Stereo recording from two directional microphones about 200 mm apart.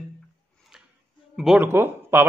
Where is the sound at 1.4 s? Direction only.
5° right (ahead or behind).